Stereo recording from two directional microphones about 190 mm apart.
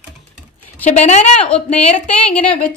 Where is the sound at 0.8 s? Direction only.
35° left (ahead or behind).